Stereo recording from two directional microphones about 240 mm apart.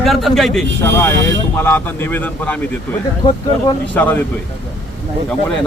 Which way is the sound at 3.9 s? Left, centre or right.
Centre.